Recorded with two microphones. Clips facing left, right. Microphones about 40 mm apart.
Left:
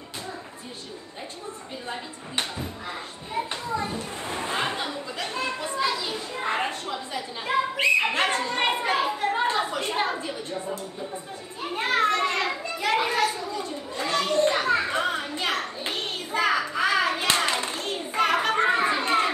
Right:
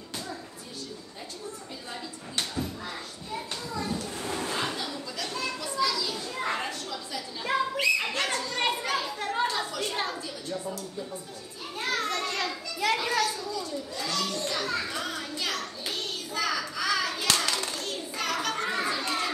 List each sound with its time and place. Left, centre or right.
1.9 s chopping: left
3.3 s children playing: left